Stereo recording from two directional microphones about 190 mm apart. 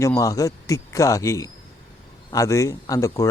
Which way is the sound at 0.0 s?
15° left (ahead or behind).